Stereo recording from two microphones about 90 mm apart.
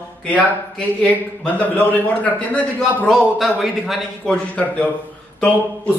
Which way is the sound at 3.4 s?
Centre (ahead or behind).